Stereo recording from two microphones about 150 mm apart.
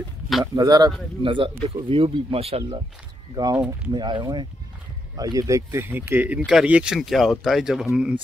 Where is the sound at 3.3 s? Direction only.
25° right (ahead or behind).